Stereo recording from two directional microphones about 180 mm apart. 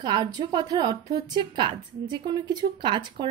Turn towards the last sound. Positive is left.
turn(degrees=-25)  # may be behind; listen again after turning